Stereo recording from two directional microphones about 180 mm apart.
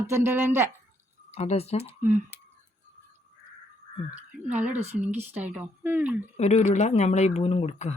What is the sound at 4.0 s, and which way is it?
Speech, 30° left (ahead or behind).